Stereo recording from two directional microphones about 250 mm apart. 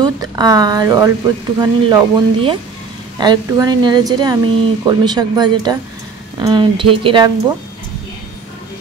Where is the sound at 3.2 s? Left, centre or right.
Centre.